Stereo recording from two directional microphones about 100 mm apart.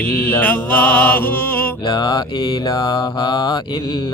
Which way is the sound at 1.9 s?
45° left (ahead or behind).